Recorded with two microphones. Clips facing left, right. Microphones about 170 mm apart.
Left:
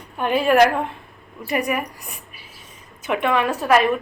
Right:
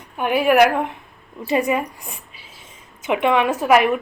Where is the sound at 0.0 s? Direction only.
15° right (ahead or behind).